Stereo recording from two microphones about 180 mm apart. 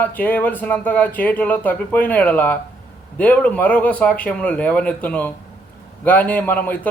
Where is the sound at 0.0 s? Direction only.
10° left (ahead or behind).